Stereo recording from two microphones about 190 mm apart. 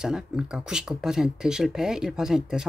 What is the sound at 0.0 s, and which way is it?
Speech, 5° right (ahead or behind).